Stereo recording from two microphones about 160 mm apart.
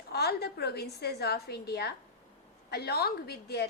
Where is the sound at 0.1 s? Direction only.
90° left.